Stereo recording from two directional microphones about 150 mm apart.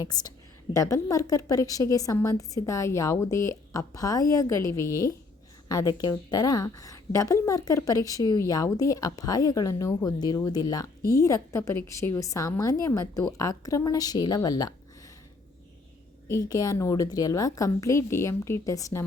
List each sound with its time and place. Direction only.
0.0 s a woman's voice: 25° left (ahead or behind)
16.3 s a woman's voice: 25° left (ahead or behind)